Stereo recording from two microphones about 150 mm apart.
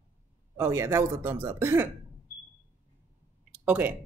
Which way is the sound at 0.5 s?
20° right (ahead or behind).